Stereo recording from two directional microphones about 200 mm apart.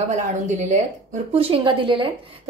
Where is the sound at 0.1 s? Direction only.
35° right (ahead or behind).